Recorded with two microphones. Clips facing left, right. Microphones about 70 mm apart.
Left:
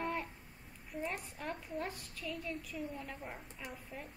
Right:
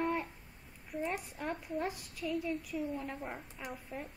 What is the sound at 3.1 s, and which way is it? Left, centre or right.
Speech, centre.